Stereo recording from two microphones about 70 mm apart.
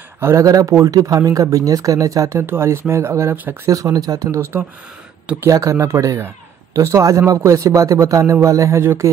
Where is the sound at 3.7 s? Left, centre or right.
Right.